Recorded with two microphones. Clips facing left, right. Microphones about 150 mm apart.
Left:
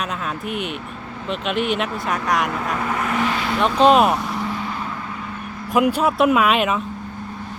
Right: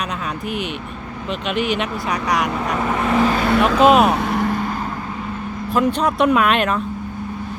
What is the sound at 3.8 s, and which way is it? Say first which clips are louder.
Speech: even; 5° right (ahead or behind).